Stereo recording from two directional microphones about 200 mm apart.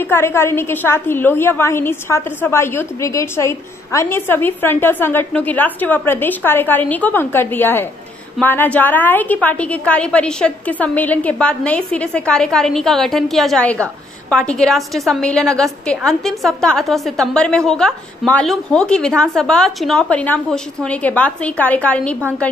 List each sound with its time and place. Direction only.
0.0 s a woman's voice: 10° left (ahead or behind)